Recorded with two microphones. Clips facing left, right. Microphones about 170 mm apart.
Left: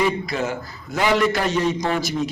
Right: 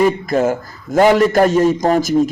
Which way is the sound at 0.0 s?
45° right (ahead or behind).